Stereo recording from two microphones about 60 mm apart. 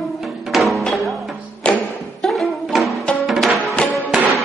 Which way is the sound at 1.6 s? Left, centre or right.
Centre.